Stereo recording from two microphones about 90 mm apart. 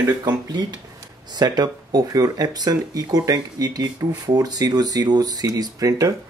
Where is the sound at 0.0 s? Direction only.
50° right (ahead or behind).